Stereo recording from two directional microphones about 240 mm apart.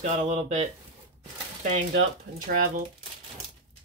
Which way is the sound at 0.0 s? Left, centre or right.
Right.